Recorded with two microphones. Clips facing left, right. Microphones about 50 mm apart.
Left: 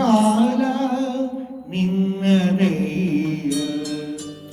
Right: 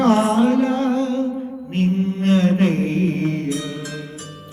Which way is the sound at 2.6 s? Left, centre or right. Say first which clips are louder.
Right 2 dB; right.